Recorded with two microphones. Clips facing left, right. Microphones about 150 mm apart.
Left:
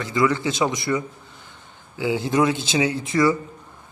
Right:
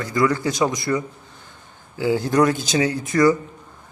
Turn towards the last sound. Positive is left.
turn(degrees=25)  # may be behind; listen again after turning